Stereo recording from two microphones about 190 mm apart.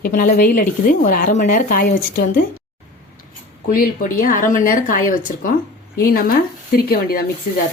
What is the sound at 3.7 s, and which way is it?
A woman's voice, 50° left (ahead or behind).